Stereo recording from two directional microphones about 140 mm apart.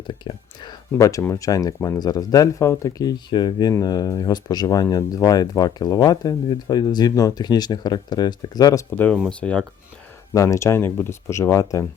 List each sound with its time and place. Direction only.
0.1 s speech: 30° left (ahead or behind)
9.4 s speech: 10° left (ahead or behind)
10.3 s speech: 20° left (ahead or behind)